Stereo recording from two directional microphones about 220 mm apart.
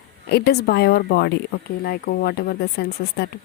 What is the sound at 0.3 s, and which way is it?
Speech, 45° left (ahead or behind).